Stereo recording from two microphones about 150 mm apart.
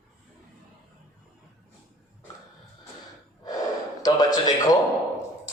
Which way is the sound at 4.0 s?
25° left (ahead or behind).